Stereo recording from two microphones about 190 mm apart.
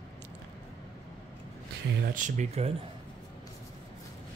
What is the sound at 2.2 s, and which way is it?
Speech, 40° right (ahead or behind).